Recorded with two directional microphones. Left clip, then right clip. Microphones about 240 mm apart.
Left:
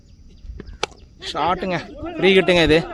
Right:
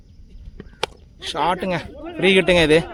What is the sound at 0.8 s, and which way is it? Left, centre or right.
Speech, centre.